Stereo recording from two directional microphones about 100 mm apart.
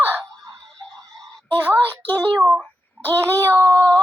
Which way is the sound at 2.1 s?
15° left (ahead or behind).